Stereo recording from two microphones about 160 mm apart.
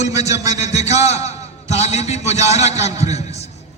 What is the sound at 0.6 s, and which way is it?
A man's voice, 45° left (ahead or behind).